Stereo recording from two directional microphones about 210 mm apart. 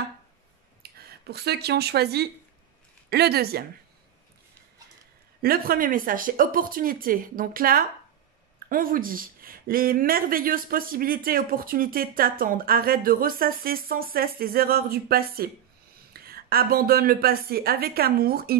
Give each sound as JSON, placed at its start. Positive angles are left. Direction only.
{"t": 0.9, "sound": "speech", "side_deg": -50}
{"t": 5.4, "sound": "speech", "side_deg": -45}